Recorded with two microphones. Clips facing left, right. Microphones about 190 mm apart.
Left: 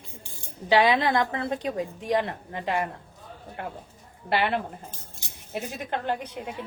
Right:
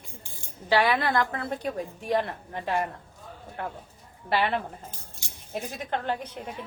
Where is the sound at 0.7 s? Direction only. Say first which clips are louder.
Left 3 dB; 20° left (ahead or behind).